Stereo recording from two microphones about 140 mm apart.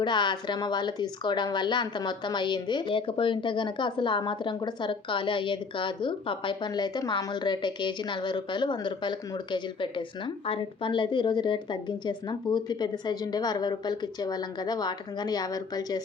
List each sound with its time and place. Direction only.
0.0 s speech: 30° left (ahead or behind)